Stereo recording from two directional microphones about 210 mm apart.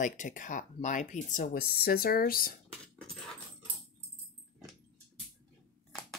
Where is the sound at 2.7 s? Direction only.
5° left (ahead or behind).